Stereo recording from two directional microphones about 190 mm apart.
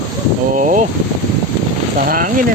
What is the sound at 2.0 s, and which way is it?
Speech, 45° right (ahead or behind).